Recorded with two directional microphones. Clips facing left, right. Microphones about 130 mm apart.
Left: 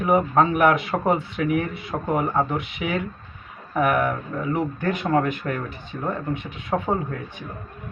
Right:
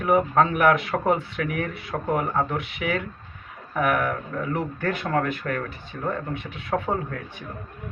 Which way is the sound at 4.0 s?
20° left (ahead or behind).